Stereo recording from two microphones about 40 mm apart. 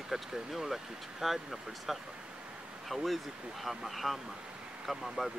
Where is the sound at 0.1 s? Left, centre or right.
Centre.